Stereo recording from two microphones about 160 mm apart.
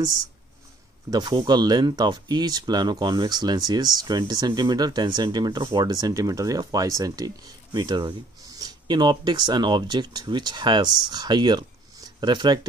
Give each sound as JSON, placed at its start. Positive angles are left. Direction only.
{"t": 1.1, "sound": "speech", "side_deg": -25}